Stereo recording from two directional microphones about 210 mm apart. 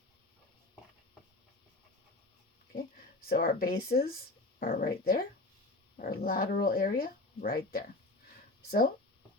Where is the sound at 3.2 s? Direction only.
45° left (ahead or behind).